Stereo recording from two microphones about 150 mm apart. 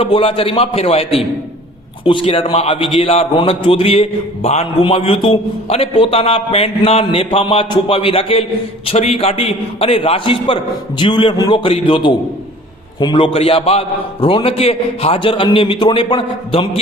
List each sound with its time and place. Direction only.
0.0 s a man's voice: 40° left (ahead or behind)